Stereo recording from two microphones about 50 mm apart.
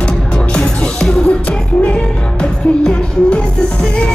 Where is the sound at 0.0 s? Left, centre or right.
Centre.